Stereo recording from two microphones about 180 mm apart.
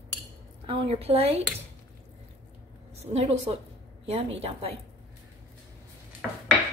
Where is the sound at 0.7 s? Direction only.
35° right (ahead or behind).